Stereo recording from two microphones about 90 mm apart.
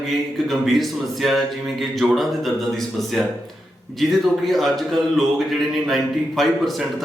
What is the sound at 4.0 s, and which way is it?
Speech, centre (ahead or behind).